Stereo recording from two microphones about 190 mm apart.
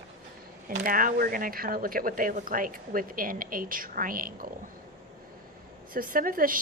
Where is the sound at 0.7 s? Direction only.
45° right (ahead or behind).